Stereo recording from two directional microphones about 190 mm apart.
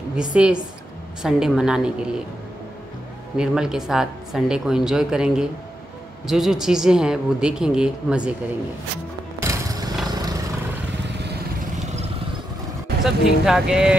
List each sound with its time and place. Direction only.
0.1 s speech: 5° right (ahead or behind)
3.3 s speech: 5° right (ahead or behind)
9.4 s a sound: 20° right (ahead or behind)
10.0 s vehicle: 20° right (ahead or behind)
13.0 s speech: centre (ahead or behind)